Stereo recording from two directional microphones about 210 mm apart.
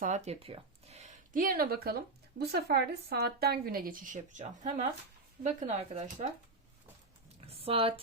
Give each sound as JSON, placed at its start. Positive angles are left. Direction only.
{"t": 0.0, "sound": "a woman's voice", "side_deg": -35}
{"t": 7.4, "sound": "speech", "side_deg": -30}